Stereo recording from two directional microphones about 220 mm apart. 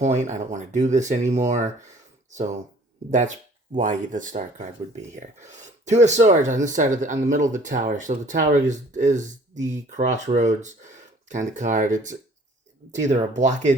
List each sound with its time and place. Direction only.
0.0 s speech: 30° right (ahead or behind)
3.1 s speech: 35° right (ahead or behind)